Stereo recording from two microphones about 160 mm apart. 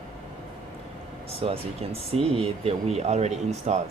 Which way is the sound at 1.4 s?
40° right (ahead or behind).